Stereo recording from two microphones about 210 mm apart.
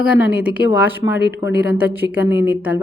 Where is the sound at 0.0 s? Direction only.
5° right (ahead or behind).